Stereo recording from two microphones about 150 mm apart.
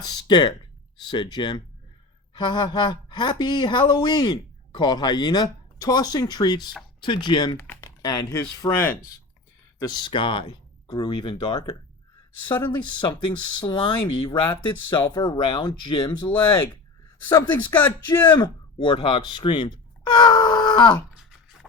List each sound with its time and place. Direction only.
0.0 s speech: 25° left (ahead or behind)
7.5 s speech: 15° left (ahead or behind)
9.7 s speech: 25° left (ahead or behind)
17.7 s speech: 15° left (ahead or behind)
18.3 s speech: 30° left (ahead or behind)